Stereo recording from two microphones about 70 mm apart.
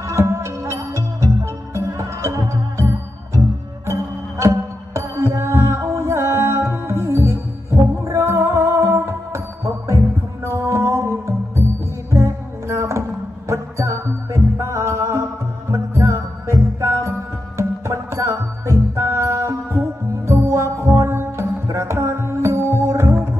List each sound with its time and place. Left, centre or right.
0.0 s music: right